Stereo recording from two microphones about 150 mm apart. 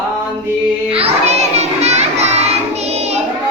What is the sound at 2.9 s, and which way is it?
Child singing, 45° right (ahead or behind).